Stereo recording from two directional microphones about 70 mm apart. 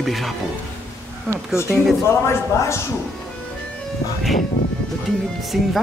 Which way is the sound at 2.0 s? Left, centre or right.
Left.